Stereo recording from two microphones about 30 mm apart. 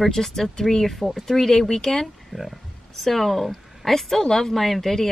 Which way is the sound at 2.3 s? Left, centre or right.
Right.